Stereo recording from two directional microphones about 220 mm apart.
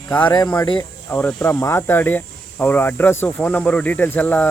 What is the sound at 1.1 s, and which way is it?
Speech, 10° left (ahead or behind).